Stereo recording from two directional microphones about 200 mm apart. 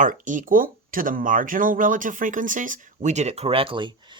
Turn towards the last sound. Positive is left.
turn(degrees=-25)  # may be behind; listen again after turning